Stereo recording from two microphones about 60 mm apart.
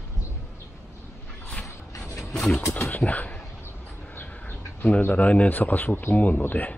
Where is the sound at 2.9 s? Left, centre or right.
Left.